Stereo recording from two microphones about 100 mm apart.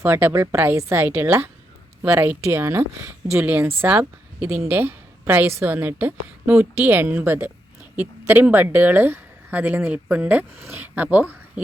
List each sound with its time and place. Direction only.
0.0 s a woman's voice: 20° right (ahead or behind)